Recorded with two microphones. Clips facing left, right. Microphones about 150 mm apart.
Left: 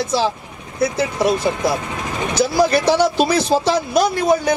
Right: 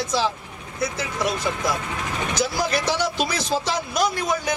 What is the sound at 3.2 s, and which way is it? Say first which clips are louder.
Speech: left 8 dB; 30° left (ahead or behind).